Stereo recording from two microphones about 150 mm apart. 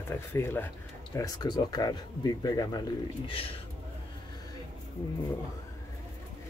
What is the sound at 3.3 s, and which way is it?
Speech, 40° left (ahead or behind).